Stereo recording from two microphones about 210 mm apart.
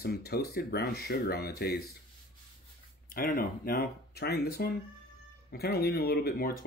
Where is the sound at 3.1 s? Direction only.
45° left (ahead or behind).